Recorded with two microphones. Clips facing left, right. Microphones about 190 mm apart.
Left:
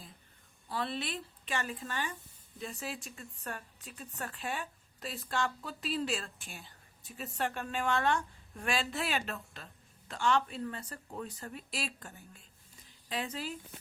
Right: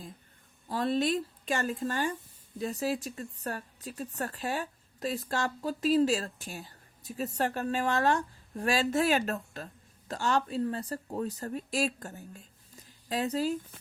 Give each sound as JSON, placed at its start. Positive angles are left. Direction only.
{"t": 0.7, "sound": "a woman's voice", "side_deg": -45}